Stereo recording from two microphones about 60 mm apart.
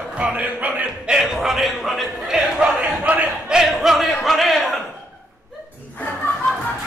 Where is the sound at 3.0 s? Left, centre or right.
Right.